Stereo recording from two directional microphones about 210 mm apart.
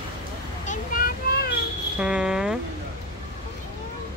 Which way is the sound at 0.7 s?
45° left (ahead or behind).